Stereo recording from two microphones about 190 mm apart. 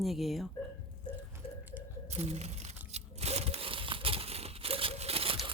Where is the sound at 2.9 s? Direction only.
35° right (ahead or behind).